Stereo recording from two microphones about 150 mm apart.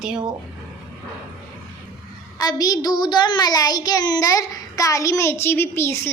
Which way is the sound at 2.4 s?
25° left (ahead or behind).